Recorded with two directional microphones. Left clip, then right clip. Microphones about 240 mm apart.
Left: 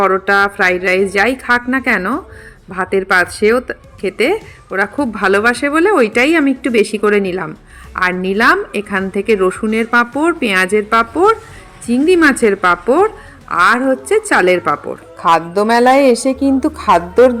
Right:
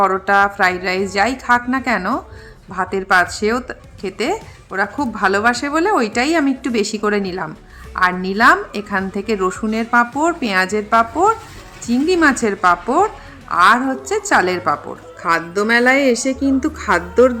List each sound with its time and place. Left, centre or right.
0.0 s a woman's voice: centre